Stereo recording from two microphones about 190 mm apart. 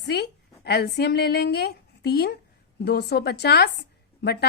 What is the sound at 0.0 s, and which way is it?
A woman's voice, 60° left (ahead or behind).